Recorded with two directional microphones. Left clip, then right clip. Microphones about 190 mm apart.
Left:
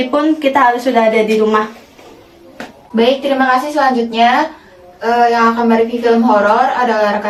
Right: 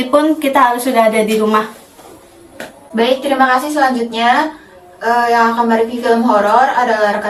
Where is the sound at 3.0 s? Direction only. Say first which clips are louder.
Even; centre (ahead or behind).